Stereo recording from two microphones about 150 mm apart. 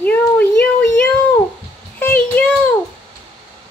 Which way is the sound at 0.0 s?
10° left (ahead or behind).